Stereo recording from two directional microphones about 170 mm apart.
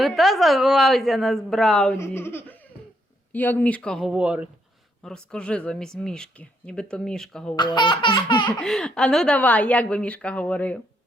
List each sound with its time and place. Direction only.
0.0 s speech: centre (ahead or behind)
2.0 s a woman's voice: 15° left (ahead or behind); by 4.4 s 5° right (ahead or behind)
5.0 s speech: 5° left (ahead or behind)
7.5 s laughter: 25° left (ahead or behind)
8.4 s a woman's voice: 5° left (ahead or behind)